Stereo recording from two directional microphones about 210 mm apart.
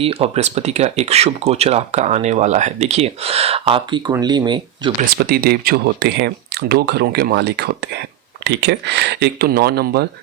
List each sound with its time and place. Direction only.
0.0 s speech: 30° right (ahead or behind)
5.1 s speech: 45° right (ahead or behind)